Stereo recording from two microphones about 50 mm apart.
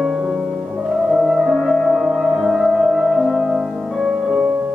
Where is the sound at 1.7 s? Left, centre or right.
Centre.